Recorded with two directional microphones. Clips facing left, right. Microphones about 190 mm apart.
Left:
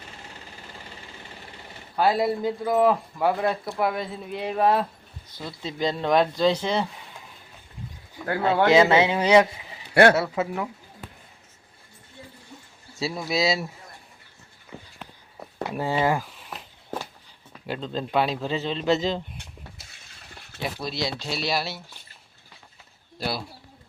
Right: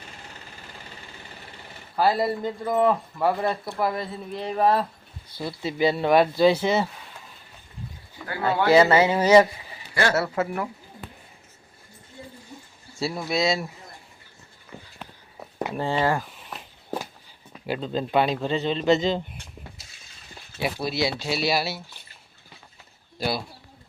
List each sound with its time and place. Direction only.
2.0 s speech: centre (ahead or behind)
5.4 s speech: 10° right (ahead or behind)
8.7 s speech: centre (ahead or behind)
9.9 s speech: 60° left (ahead or behind)
10.4 s speech: 10° left (ahead or behind)
13.0 s speech: centre (ahead or behind)
15.7 s speech: 10° left (ahead or behind)
17.7 s speech: 5° right (ahead or behind)
20.6 s speech: 10° right (ahead or behind)
23.1 s speech: centre (ahead or behind)